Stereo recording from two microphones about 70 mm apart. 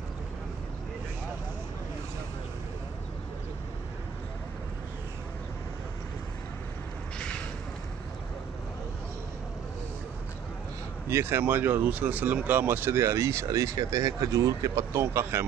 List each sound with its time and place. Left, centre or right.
11.1 s speech: right
15.0 s speech: right